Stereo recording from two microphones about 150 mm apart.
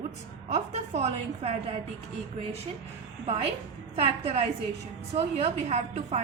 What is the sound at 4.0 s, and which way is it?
A woman's voice, 45° right (ahead or behind).